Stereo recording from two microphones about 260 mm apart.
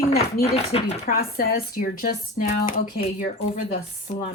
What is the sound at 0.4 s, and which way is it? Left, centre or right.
A woman's voice, left.